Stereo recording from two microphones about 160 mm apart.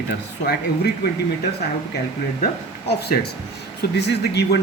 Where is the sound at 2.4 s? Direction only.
80° left.